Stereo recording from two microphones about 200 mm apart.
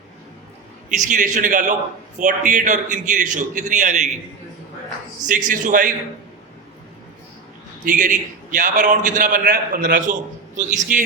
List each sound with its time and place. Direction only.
0.9 s a man's voice: 40° right (ahead or behind)
5.5 s a man's voice: 40° right (ahead or behind)
7.9 s a man's voice: 40° right (ahead or behind)